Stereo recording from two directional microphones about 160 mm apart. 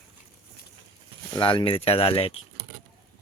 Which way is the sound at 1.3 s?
30° left (ahead or behind).